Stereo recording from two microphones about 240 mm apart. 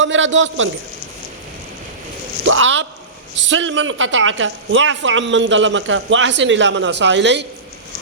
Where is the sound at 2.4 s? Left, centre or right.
Right.